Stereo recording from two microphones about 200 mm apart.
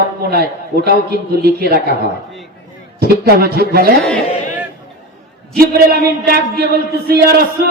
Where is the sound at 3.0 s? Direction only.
50° right (ahead or behind).